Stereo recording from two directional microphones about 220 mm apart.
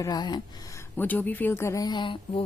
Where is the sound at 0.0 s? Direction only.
20° left (ahead or behind).